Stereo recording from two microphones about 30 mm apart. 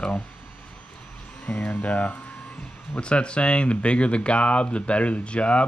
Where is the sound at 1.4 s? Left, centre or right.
Left.